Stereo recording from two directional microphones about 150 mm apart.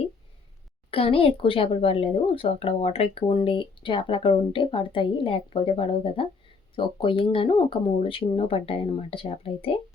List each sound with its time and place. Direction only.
0.9 s a woman's voice: 40° left (ahead or behind)